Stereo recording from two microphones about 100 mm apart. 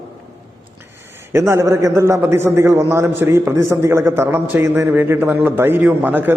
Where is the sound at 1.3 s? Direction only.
30° right (ahead or behind).